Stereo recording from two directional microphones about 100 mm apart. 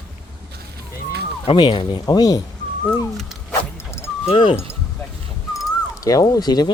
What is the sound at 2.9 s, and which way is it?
Speech, centre (ahead or behind).